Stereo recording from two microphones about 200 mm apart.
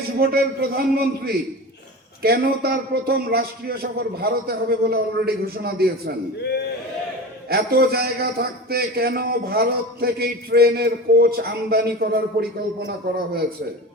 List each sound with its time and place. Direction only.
0.2 s a man's voice: 50° right (ahead or behind)
6.4 s a sound: 55° left (ahead or behind)
7.5 s a man's voice: 50° right (ahead or behind)